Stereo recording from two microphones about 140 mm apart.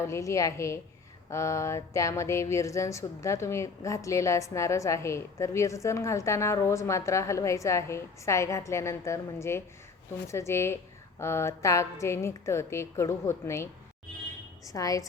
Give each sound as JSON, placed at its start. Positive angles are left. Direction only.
{"t": 0.0, "sound": "speech", "side_deg": 20}